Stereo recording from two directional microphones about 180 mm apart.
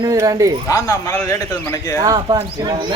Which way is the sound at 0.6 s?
20° left (ahead or behind).